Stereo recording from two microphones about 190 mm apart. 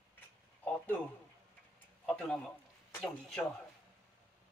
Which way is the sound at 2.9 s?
5° left (ahead or behind).